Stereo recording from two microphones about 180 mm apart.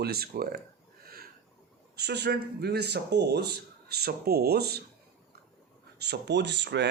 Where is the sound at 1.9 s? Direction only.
65° right (ahead or behind).